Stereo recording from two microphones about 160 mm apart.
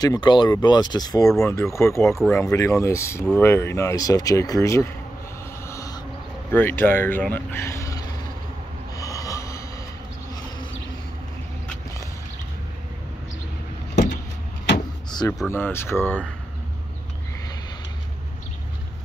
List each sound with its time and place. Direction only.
0.0 s speech: 25° left (ahead or behind)
5.7 s owl: 20° left (ahead or behind)
6.5 s speech: 15° left (ahead or behind)
8.9 s a sound: 20° left (ahead or behind)
15.0 s a sound: 25° left (ahead or behind)
15.5 s speech: 15° left (ahead or behind)